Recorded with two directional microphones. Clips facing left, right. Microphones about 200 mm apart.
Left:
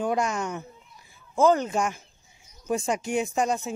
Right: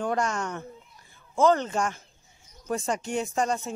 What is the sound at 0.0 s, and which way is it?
Speech, 10° left (ahead or behind).